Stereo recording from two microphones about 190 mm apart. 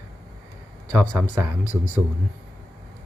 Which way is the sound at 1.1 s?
15° right (ahead or behind).